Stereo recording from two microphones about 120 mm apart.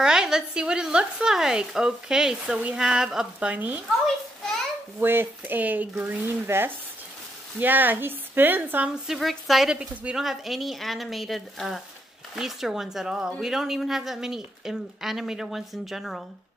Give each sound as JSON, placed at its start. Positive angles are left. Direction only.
{"t": 0.0, "sound": "speech", "side_deg": -5}
{"t": 5.0, "sound": "speech", "side_deg": -15}
{"t": 9.0, "sound": "speech", "side_deg": 0}